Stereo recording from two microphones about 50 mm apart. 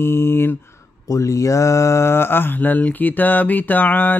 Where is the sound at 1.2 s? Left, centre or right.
Left.